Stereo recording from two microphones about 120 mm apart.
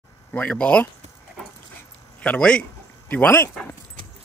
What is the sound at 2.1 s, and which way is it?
Speech, 10° left (ahead or behind).